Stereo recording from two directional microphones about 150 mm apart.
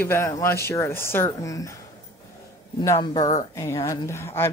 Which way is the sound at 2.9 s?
25° left (ahead or behind).